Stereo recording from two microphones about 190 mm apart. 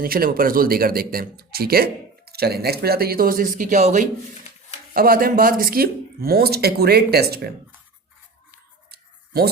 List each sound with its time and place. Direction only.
0.0 s speech: 50° right (ahead or behind)
4.9 s speech: 50° right (ahead or behind)
8.9 s a sound: 55° right (ahead or behind)